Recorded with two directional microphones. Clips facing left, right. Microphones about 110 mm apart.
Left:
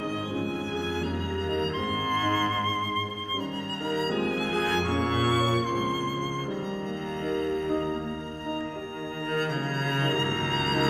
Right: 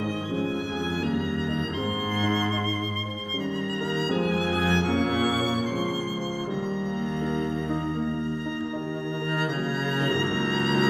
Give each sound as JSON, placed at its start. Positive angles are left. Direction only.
{"t": 2.1, "sound": "music", "side_deg": -15}
{"t": 4.5, "sound": "music", "side_deg": -15}
{"t": 10.0, "sound": "music", "side_deg": -15}